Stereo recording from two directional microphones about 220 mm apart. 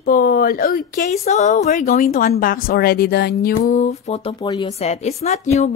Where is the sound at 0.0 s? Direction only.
40° left (ahead or behind).